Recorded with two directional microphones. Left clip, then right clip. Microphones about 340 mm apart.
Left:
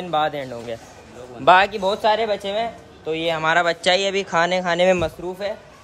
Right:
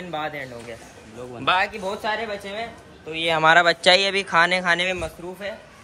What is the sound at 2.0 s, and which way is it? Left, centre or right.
Speech, left.